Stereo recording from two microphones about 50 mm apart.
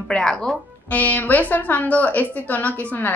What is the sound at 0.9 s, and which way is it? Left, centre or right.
A woman's voice, left.